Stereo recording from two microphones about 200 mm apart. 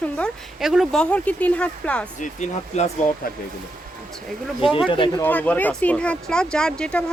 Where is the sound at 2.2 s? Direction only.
35° left (ahead or behind).